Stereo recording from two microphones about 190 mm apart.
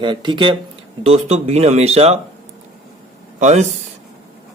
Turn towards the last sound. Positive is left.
turn(degrees=-40)  # may be behind; listen again after turning